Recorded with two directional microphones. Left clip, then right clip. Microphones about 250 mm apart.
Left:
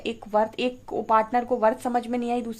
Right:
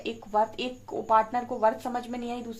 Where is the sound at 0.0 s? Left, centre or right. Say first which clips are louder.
Left 3 dB; left.